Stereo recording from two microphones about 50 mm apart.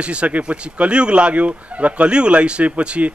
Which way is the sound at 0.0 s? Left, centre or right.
Right.